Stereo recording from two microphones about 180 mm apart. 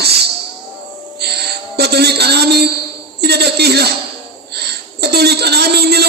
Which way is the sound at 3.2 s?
65° right (ahead or behind).